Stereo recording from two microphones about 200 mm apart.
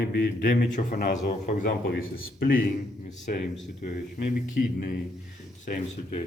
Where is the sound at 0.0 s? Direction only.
50° left (ahead or behind).